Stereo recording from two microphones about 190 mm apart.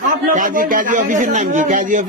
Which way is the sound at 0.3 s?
45° right (ahead or behind).